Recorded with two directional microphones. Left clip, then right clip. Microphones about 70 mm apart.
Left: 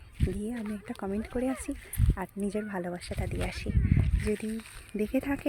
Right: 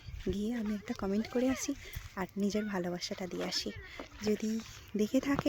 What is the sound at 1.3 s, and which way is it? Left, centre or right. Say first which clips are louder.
Speech: even; right.